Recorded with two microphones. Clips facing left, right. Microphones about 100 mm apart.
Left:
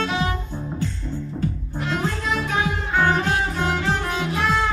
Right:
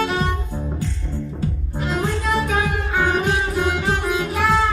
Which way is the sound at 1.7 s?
Centre (ahead or behind).